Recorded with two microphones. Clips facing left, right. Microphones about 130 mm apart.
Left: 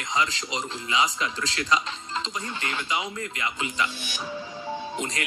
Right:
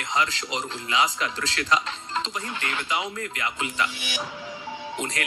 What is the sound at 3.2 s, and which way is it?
Speech, 50° right (ahead or behind).